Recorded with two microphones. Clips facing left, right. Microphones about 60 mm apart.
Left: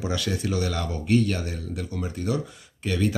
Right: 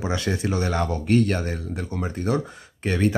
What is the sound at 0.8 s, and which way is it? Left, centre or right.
Speech, right.